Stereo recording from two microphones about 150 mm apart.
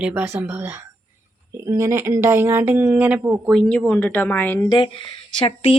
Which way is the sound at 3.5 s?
5° left (ahead or behind).